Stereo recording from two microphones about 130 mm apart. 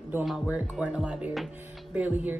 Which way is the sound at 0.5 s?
10° right (ahead or behind).